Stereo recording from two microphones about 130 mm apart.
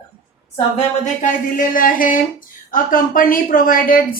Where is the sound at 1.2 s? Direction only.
90° left.